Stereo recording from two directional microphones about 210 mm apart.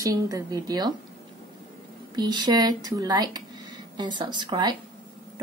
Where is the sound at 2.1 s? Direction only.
20° right (ahead or behind).